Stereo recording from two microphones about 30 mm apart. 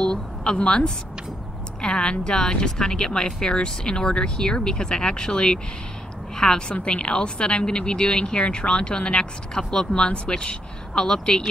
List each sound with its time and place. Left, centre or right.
0.0 s a woman's voice: left
6.7 s a woman's voice: left